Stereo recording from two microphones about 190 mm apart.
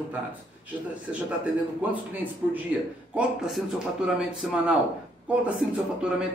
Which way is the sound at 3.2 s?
Centre (ahead or behind).